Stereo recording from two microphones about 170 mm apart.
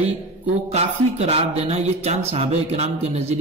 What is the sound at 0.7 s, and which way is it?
Speech, 40° right (ahead or behind).